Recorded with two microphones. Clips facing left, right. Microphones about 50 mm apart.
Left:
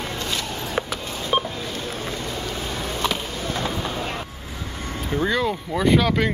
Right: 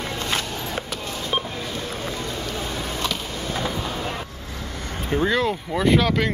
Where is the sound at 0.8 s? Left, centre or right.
Centre.